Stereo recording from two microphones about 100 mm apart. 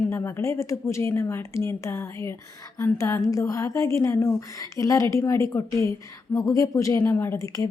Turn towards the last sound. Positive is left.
turn(degrees=30)  # may be behind; listen again after turning